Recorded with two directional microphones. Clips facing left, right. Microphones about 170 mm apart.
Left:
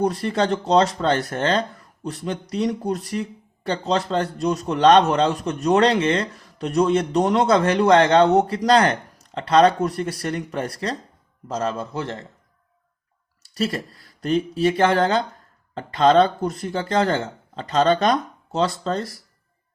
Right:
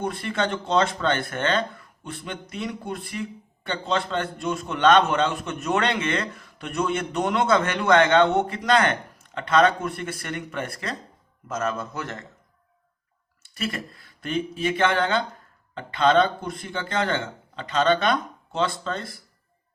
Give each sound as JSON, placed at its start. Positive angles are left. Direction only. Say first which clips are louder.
{"t": 0.0, "sound": "speech", "louder": "left 5 dB", "side_deg": 35}
{"t": 13.4, "sound": "speech", "louder": "left 6 dB", "side_deg": 35}